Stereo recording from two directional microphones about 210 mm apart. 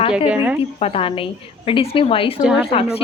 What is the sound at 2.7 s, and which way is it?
Speech, 30° left (ahead or behind).